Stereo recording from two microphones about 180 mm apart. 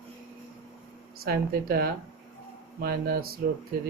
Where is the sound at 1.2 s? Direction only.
55° right (ahead or behind).